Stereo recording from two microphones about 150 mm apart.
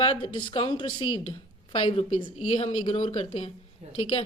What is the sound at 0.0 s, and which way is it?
A woman's voice, 30° left (ahead or behind).